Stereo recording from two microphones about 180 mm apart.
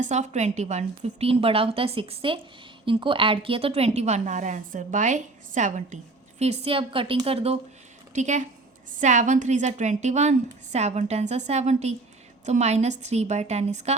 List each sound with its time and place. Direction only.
0.0 s a woman's voice: 40° right (ahead or behind)